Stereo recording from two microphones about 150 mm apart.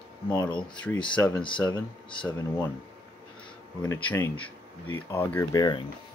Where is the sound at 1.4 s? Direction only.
35° left (ahead or behind).